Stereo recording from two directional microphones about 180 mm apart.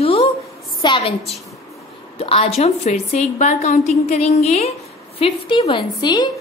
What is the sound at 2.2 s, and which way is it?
A woman's voice, 35° left (ahead or behind).